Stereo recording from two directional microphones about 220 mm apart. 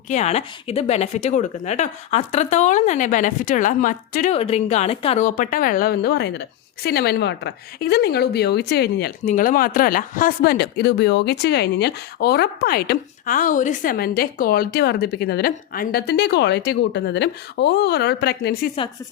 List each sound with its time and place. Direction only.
0.1 s speech: 30° left (ahead or behind); by 18.7 s 50° left (ahead or behind)